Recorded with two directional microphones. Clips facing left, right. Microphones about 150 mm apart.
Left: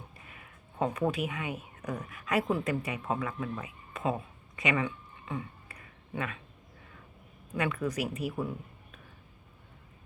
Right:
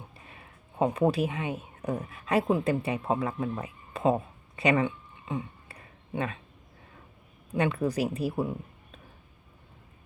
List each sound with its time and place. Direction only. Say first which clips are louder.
0.3 s a sound: right 2 dB; 30° right (ahead or behind)
0.9 s speech: right 5 dB; 30° right (ahead or behind)
7.5 s speech: right 4 dB; 30° right (ahead or behind)